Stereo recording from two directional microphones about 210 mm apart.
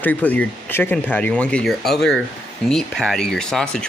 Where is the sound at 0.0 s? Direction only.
5° left (ahead or behind).